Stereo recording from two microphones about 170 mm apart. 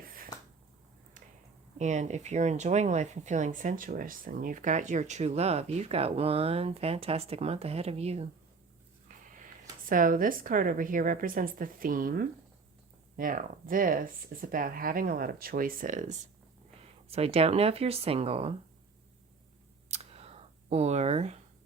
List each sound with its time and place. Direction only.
1.8 s speech: 45° right (ahead or behind)
9.0 s speech: 50° right (ahead or behind)
16.8 s speech: 35° right (ahead or behind)
19.9 s scissors: 35° right (ahead or behind)